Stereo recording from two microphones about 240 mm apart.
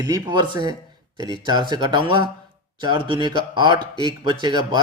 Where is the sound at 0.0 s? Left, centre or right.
Centre.